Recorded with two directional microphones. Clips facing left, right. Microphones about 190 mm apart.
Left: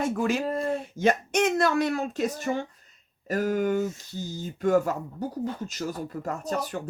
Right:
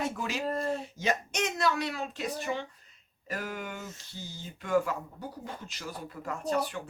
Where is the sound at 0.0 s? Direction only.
50° left (ahead or behind).